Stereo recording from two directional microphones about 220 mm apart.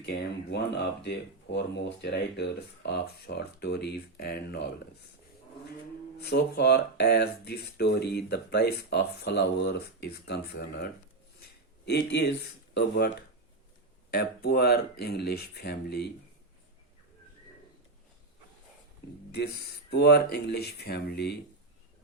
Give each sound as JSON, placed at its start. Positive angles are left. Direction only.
{"t": 0.0, "sound": "speech", "side_deg": 50}
{"t": 6.2, "sound": "speech", "side_deg": 45}
{"t": 14.1, "sound": "speech", "side_deg": 45}
{"t": 19.3, "sound": "speech", "side_deg": 50}